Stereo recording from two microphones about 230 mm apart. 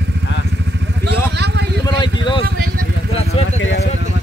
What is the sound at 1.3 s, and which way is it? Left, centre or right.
Vehicle, right.